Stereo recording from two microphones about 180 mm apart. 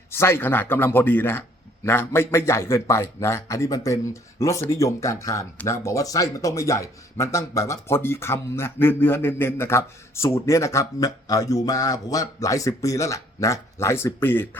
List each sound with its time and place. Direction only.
0.1 s speech: 15° left (ahead or behind)